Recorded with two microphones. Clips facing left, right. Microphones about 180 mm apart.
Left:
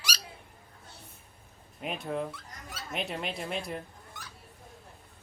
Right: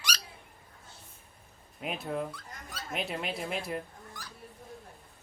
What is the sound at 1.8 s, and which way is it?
Speech, centre (ahead or behind).